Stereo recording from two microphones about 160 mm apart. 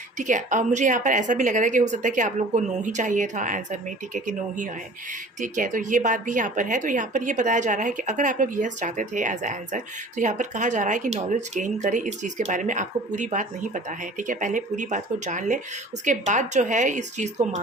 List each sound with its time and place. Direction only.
0.2 s speech: 50° right (ahead or behind)